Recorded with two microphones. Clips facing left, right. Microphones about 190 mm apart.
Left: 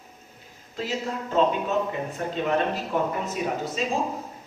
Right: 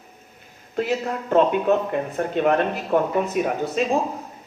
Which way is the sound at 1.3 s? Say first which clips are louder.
Right 5 dB; 60° right (ahead or behind).